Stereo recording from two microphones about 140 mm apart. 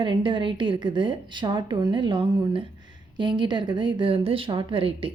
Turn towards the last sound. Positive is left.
turn(degrees=-40)  # may be behind; listen again after turning